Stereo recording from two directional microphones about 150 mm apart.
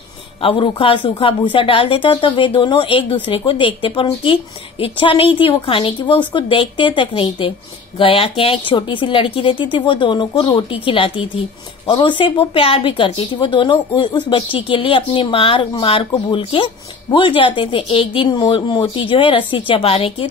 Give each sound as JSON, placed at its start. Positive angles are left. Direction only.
{"t": 0.4, "sound": "speech", "side_deg": 35}